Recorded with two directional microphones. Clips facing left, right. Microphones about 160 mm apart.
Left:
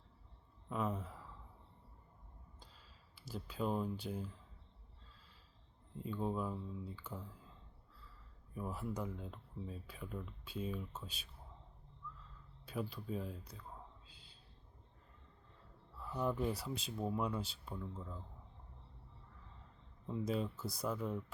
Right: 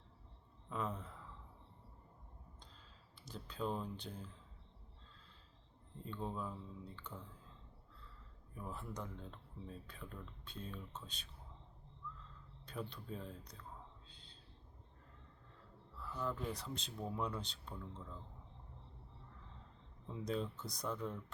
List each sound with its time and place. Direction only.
0.7 s speech: 5° left (ahead or behind)
2.6 s a sound: 5° left (ahead or behind)
6.0 s speech: 5° left (ahead or behind)
8.5 s speech: 5° left (ahead or behind)
12.6 s speech: 5° left (ahead or behind)
14.1 s a sound: 5° left (ahead or behind)
16.0 s speech: 15° left (ahead or behind)
16.6 s speech: 5° left (ahead or behind)
20.1 s speech: 5° left (ahead or behind)